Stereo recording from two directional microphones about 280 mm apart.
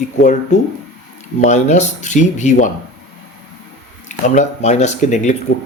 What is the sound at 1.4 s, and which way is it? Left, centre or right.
Speech, left.